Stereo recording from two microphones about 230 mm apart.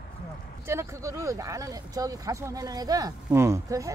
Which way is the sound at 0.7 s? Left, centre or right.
Centre.